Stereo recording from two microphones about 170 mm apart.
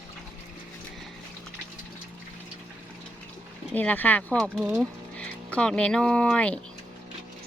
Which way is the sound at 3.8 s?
10° left (ahead or behind).